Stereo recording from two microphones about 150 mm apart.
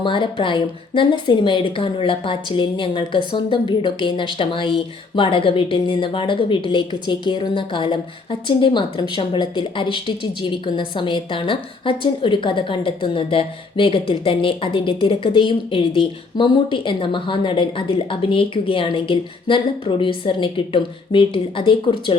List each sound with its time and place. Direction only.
0.0 s a woman's voice: 35° left (ahead or behind)